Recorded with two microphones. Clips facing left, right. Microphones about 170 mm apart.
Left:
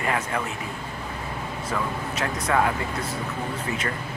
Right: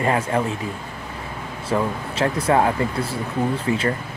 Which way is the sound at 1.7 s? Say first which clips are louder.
Right 7 dB; 30° right (ahead or behind).